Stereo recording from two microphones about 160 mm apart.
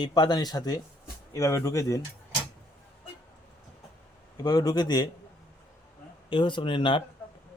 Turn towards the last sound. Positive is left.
turn(degrees=30)  # may be behind; listen again after turning